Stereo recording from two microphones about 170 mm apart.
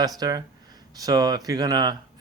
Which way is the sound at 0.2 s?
25° right (ahead or behind).